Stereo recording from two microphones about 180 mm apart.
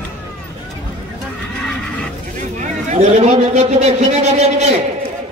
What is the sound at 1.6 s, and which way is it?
Neigh, 5° left (ahead or behind).